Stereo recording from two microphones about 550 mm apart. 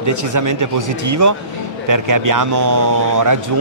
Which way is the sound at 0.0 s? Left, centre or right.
Right.